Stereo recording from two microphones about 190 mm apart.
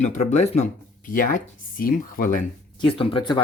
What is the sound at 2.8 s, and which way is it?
Speech, 25° left (ahead or behind).